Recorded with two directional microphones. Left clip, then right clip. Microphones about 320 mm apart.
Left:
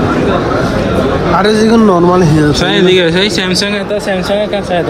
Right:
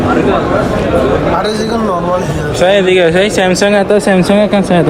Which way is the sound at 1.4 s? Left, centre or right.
Left.